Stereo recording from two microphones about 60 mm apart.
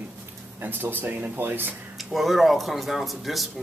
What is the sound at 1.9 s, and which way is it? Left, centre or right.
Speech, centre.